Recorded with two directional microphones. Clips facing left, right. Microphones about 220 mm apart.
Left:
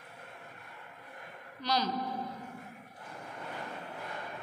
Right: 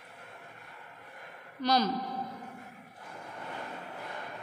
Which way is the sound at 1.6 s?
50° right (ahead or behind).